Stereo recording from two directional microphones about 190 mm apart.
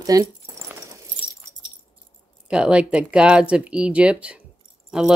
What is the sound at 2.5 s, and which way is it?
Speech, 5° right (ahead or behind).